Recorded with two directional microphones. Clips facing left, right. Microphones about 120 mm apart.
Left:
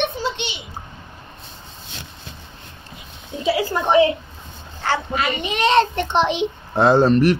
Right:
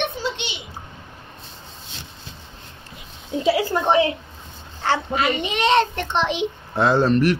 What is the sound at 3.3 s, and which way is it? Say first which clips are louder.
Speech: right 4 dB; 60° right (ahead or behind).